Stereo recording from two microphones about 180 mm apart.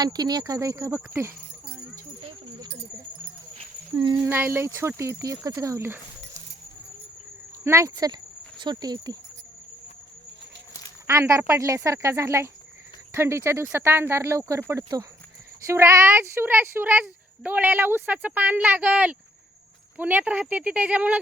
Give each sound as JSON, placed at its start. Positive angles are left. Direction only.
{"t": 0.0, "sound": "speech", "side_deg": -20}
{"t": 3.6, "sound": "a sound", "side_deg": -30}
{"t": 4.1, "sound": "speech", "side_deg": -15}
{"t": 7.6, "sound": "speech", "side_deg": -15}
{"t": 11.0, "sound": "speech", "side_deg": -15}